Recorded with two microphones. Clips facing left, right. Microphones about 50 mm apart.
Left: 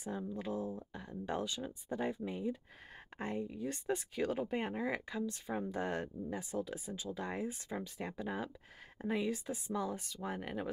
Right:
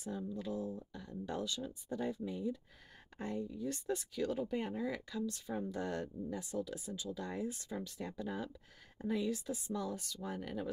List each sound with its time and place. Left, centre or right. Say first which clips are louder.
0.0 s speech: left 1 dB; left